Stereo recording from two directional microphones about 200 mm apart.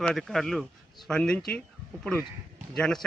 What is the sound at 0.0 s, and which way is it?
Speech, centre (ahead or behind).